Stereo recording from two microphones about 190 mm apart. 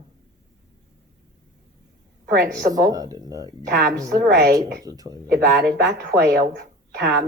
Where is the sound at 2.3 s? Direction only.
55° right (ahead or behind).